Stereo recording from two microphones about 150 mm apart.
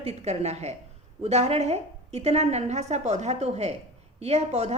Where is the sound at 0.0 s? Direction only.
45° right (ahead or behind).